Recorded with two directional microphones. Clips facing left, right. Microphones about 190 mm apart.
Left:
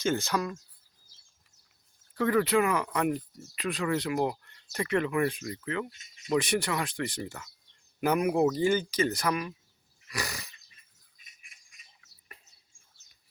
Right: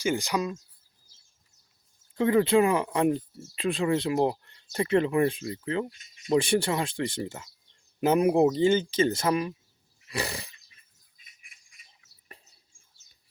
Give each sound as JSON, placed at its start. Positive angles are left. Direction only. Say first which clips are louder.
{"t": 0.0, "sound": "speech", "louder": "right 1 dB", "side_deg": -15}
{"t": 2.1, "sound": "speech", "louder": "right 4 dB", "side_deg": -25}
{"t": 10.1, "sound": "dog", "louder": "right 4 dB", "side_deg": -30}